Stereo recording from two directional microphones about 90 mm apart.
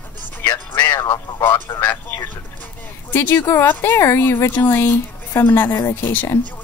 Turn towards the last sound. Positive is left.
turn(degrees=30)  # may be behind; listen again after turning